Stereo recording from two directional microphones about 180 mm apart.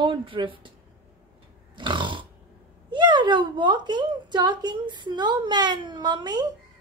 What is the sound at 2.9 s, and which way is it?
A woman's voice, 25° right (ahead or behind).